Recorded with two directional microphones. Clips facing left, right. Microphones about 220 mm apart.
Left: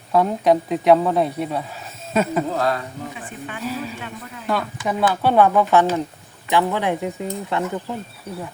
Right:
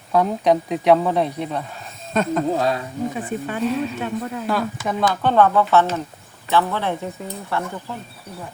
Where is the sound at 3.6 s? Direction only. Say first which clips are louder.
Right 5 dB; 5° left (ahead or behind).